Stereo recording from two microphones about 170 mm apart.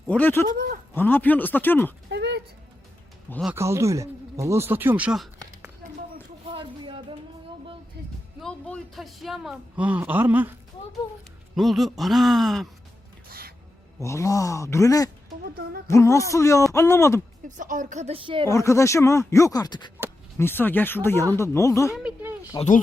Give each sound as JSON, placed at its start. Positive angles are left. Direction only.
{"t": 0.1, "sound": "speech", "side_deg": 10}
{"t": 0.5, "sound": "speech", "side_deg": -55}
{"t": 0.9, "sound": "speech", "side_deg": 10}
{"t": 2.0, "sound": "a sound", "side_deg": -80}
{"t": 3.5, "sound": "speech", "side_deg": -15}
{"t": 6.5, "sound": "a sound", "side_deg": -30}
{"t": 8.4, "sound": "speech", "side_deg": 0}
{"t": 11.5, "sound": "speech", "side_deg": 0}
{"t": 14.0, "sound": "speech", "side_deg": 15}
{"t": 17.6, "sound": "speech", "side_deg": -50}
{"t": 18.4, "sound": "speech", "side_deg": 15}
{"t": 20.4, "sound": "speech", "side_deg": 10}